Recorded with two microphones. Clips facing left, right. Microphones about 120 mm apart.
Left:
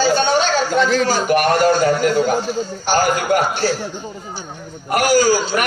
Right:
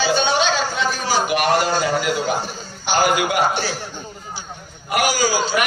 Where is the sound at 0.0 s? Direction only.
50° left (ahead or behind).